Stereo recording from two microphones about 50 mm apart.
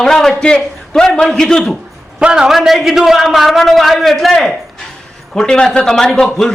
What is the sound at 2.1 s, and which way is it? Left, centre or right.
Speech, centre.